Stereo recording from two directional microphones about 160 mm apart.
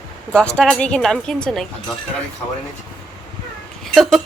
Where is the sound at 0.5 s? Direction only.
5° left (ahead or behind).